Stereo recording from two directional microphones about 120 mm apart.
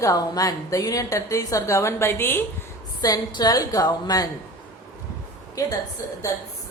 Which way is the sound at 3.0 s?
35° left (ahead or behind).